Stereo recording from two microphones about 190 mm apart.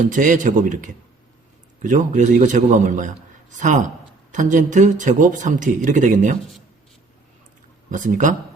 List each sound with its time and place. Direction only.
0.0 s speech: 40° right (ahead or behind)
7.9 s speech: 45° right (ahead or behind)